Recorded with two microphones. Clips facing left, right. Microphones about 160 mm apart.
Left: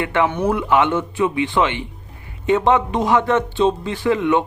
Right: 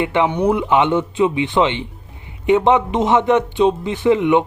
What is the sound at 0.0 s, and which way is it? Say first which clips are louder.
Speech: right 2 dB; 20° right (ahead or behind).